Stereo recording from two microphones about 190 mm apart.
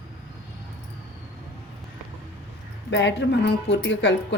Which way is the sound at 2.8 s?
70° left (ahead or behind).